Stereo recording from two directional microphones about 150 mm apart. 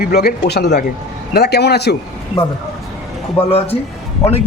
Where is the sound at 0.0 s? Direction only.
90° left.